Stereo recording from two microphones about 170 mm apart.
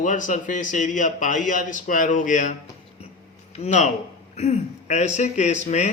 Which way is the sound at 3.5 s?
40° left (ahead or behind).